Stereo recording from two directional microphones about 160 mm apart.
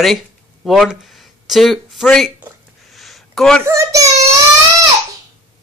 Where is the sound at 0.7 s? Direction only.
Centre (ahead or behind).